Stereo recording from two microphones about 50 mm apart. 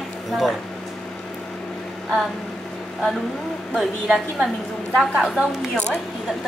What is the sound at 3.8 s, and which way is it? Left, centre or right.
Speech, centre.